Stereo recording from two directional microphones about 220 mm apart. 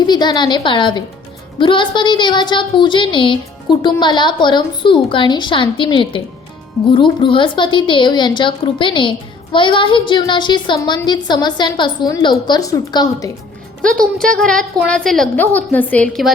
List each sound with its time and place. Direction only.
0.0 s a woman's voice: 20° left (ahead or behind)
13.8 s a woman's voice: 5° left (ahead or behind)